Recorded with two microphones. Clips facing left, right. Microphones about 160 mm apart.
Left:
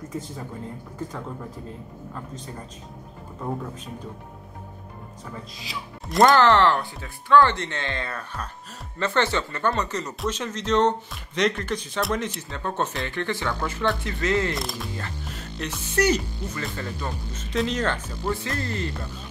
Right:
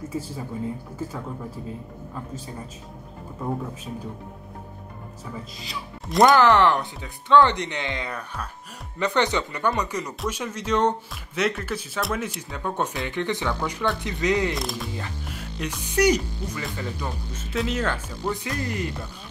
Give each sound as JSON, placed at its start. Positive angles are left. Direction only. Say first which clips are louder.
{"t": 0.9, "sound": "speech", "louder": "right 1 dB", "side_deg": -5}
{"t": 5.6, "sound": "speech", "louder": "even", "side_deg": 0}
{"t": 6.5, "sound": "speech", "louder": "even", "side_deg": -15}
{"t": 14.5, "sound": "speech", "louder": "right 1 dB", "side_deg": 0}
{"t": 15.0, "sound": "speech", "louder": "right 1 dB", "side_deg": -10}